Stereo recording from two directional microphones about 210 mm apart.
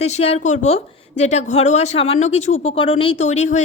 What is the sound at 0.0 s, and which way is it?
A woman's voice, 30° left (ahead or behind).